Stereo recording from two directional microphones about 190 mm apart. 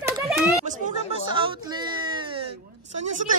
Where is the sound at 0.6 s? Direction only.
40° right (ahead or behind).